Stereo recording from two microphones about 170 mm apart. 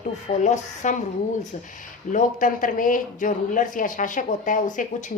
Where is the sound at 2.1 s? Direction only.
50° left (ahead or behind).